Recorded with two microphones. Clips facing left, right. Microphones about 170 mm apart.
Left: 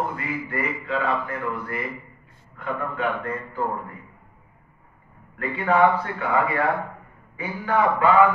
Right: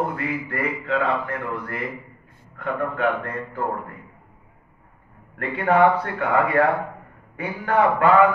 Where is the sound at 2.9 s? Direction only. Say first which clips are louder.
Right 3 dB; 65° right (ahead or behind).